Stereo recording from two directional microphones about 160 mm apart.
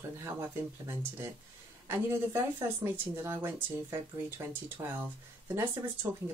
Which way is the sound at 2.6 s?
15° right (ahead or behind).